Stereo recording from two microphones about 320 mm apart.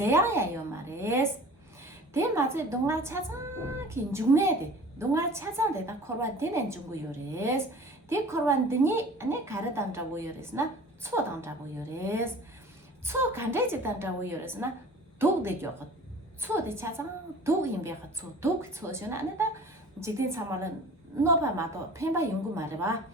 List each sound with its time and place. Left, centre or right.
0.0 s a woman's voice: centre